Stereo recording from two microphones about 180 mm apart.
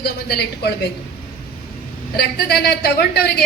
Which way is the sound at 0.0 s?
65° left (ahead or behind).